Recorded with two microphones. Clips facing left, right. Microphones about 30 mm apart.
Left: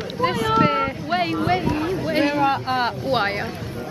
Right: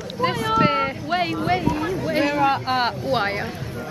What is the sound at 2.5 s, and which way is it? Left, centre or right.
Speech, centre.